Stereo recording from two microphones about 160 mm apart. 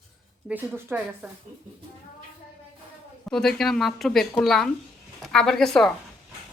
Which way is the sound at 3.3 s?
5° left (ahead or behind).